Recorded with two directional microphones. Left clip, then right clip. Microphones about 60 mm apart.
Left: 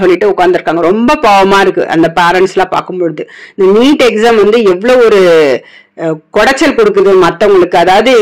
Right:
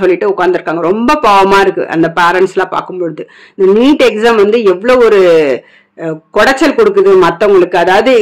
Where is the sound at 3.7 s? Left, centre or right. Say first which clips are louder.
Left 1 dB; left.